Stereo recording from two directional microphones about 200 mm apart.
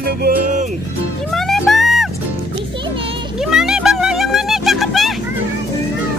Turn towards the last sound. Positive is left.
turn(degrees=0)  # may be behind; listen again after turning